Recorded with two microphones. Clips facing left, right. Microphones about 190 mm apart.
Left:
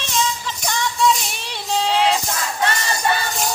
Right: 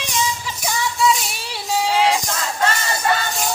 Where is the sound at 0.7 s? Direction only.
5° right (ahead or behind).